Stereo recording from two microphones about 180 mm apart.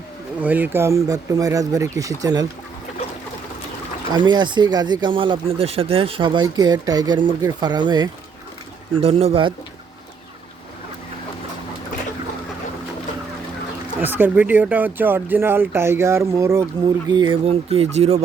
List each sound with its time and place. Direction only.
0.4 s speech: 10° right (ahead or behind)
4.1 s speech: 25° right (ahead or behind)
14.0 s speech: 10° right (ahead or behind); by 18.2 s 35° right (ahead or behind)